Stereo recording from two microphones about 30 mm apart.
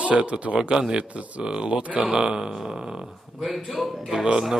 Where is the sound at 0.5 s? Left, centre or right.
Right.